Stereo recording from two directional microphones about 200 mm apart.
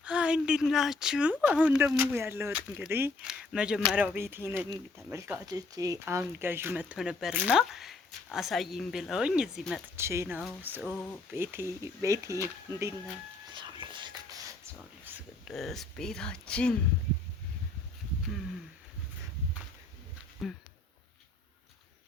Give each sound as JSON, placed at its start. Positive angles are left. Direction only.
{"t": 0.0, "sound": "speech", "side_deg": -5}
{"t": 9.9, "sound": "speech", "side_deg": -15}
{"t": 13.5, "sound": "whispering", "side_deg": -25}
{"t": 15.1, "sound": "a sound", "side_deg": -10}
{"t": 15.4, "sound": "speech", "side_deg": 0}
{"t": 20.4, "sound": "speech", "side_deg": 0}